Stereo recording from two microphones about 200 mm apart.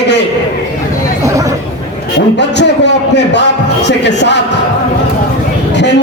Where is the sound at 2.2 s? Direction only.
60° left (ahead or behind).